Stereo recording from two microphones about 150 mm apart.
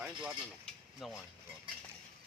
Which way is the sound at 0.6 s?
5° left (ahead or behind).